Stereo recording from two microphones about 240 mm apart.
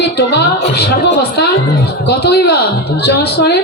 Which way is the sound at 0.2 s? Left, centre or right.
Left.